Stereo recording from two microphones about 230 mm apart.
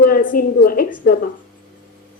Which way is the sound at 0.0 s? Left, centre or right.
Left.